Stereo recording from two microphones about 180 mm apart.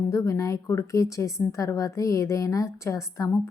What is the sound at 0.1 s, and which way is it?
A woman's voice, 15° left (ahead or behind).